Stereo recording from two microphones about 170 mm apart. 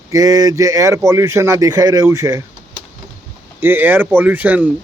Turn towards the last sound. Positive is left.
turn(degrees=-10)  # may be behind; listen again after turning